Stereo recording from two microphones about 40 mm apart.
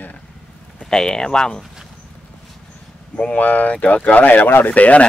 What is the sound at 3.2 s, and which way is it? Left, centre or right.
Speech, left.